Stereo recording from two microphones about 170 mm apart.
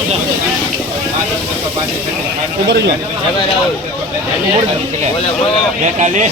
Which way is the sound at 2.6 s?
80° right.